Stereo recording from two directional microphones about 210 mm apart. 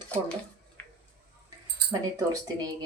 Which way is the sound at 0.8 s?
10° left (ahead or behind).